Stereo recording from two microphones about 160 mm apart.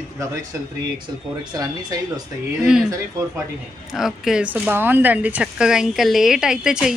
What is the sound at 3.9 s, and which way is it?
Speech, centre (ahead or behind).